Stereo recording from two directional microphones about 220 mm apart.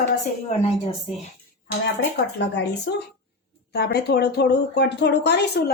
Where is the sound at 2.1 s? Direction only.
50° left (ahead or behind).